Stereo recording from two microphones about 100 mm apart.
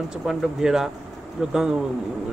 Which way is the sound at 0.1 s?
5° right (ahead or behind).